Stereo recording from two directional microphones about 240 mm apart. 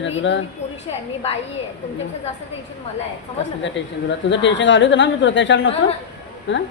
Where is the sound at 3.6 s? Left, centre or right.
Left.